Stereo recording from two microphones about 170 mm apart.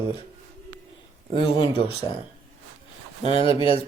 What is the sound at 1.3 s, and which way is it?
Speech, 30° left (ahead or behind).